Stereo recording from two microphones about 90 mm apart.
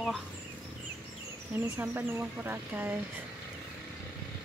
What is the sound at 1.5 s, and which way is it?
Speech, 20° right (ahead or behind).